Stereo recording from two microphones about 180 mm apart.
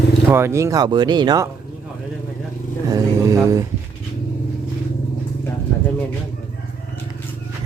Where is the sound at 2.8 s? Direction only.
20° right (ahead or behind).